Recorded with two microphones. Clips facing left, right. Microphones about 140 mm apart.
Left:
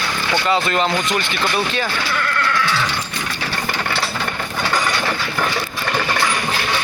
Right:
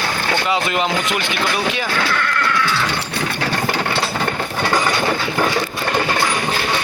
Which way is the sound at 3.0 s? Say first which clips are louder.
Right 4 dB; 65° right (ahead or behind).